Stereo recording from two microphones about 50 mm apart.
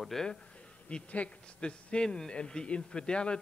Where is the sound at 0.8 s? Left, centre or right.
Left.